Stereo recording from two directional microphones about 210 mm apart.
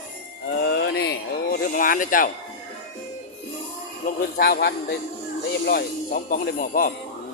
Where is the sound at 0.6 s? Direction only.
50° left (ahead or behind).